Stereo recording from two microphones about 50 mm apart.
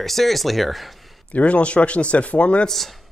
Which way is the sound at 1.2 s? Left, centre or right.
Left.